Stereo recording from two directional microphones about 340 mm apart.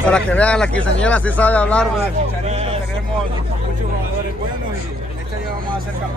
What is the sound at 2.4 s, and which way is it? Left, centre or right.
Vehicle, centre.